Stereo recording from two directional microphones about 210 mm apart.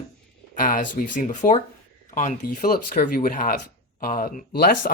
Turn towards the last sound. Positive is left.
turn(degrees=45)  # may be behind; listen again after turning